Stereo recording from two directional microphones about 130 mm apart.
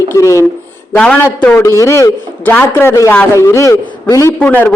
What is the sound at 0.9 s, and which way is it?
A man's voice, 5° left (ahead or behind).